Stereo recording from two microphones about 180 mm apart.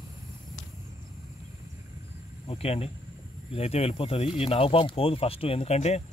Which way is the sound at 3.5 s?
35° left (ahead or behind).